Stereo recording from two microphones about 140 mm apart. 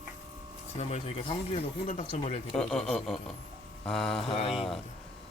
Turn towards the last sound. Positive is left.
turn(degrees=0)  # may be behind; listen again after turning